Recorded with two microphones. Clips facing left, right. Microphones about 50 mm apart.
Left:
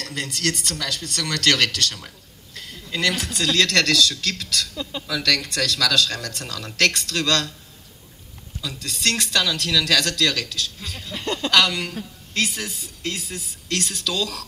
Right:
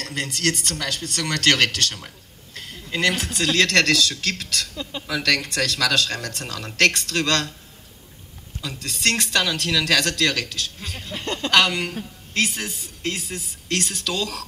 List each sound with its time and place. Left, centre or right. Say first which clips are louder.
0.0 s a man's voice: right 1 dB; centre
3.2 s speech: right 1 dB; centre
8.8 s speech: right 1 dB; centre
11.2 s speech: left 2 dB; centre
11.5 s speech: right 1 dB; right
14.0 s speech: even; right